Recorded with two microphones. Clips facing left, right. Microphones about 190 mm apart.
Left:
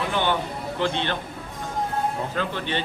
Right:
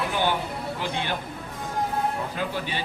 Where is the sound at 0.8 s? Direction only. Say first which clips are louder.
Left 6 dB; 10° right (ahead or behind).